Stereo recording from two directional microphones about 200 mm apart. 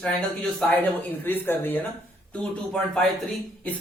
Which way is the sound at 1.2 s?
10° left (ahead or behind).